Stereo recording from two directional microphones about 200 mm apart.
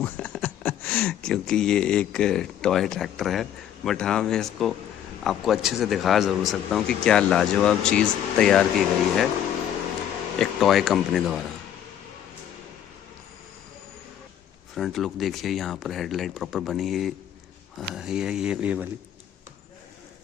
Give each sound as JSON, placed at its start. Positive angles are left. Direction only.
{"t": 0.0, "sound": "a man's voice", "side_deg": 5}
{"t": 10.4, "sound": "a man's voice", "side_deg": 0}
{"t": 14.8, "sound": "a man's voice", "side_deg": 0}